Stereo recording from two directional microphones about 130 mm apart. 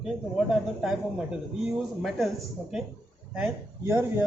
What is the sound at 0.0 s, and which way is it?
Speech, 5° right (ahead or behind).